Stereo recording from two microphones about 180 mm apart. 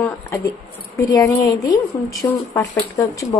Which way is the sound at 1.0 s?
20° left (ahead or behind).